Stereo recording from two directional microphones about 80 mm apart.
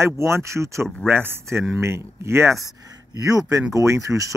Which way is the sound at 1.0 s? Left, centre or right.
Right.